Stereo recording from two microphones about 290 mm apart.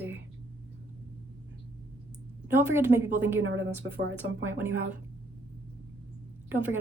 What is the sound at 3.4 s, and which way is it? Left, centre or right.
Speech, right.